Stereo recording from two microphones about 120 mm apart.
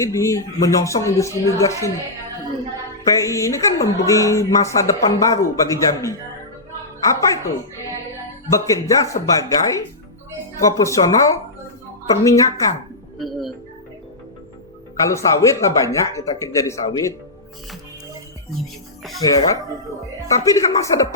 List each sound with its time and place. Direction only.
0.0 s speech: 25° left (ahead or behind)
3.0 s speech: 25° left (ahead or behind)
13.1 s speech: centre (ahead or behind)
15.1 s speech: 25° left (ahead or behind)
19.2 s speech: 30° left (ahead or behind)